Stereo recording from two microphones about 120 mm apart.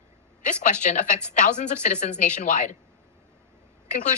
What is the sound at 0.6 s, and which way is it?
A woman's voice, 90° left.